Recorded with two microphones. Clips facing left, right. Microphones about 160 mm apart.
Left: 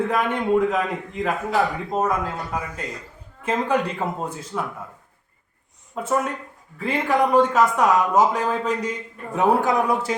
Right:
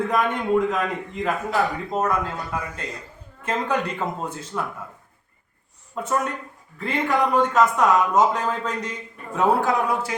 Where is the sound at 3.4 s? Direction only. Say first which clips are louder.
Left 2 dB; 10° left (ahead or behind).